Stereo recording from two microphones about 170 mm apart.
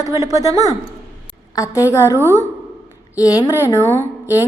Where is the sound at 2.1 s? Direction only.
15° right (ahead or behind).